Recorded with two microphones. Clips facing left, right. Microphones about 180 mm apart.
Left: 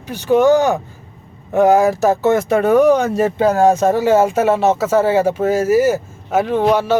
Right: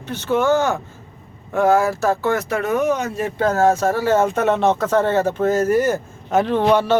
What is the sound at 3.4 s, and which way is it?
Speech, 15° left (ahead or behind).